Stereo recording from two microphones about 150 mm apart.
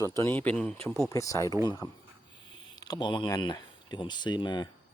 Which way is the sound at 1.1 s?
20° left (ahead or behind).